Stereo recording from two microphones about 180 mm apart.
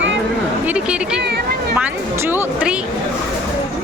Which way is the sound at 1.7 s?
10° right (ahead or behind).